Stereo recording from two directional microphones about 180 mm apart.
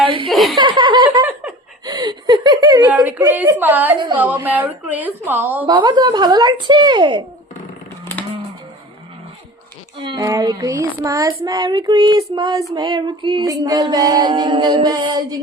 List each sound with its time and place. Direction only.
0.0 s chuckle: 30° right (ahead or behind)
0.3 s chuckle: centre (ahead or behind)
0.5 s chuckle: 25° right (ahead or behind)
1.8 s whimper: 20° right (ahead or behind)
2.9 s a woman's voice: 10° right (ahead or behind)
5.6 s child singing: 25° right (ahead or behind)
10.0 s child singing: 25° right (ahead or behind)